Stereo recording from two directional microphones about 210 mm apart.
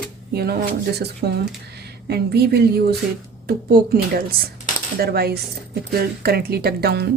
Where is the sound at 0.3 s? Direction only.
50° right (ahead or behind).